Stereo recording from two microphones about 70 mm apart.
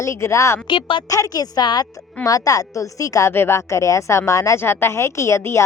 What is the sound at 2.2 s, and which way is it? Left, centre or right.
A woman's voice, left.